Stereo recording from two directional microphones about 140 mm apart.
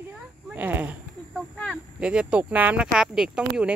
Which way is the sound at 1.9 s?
5° right (ahead or behind).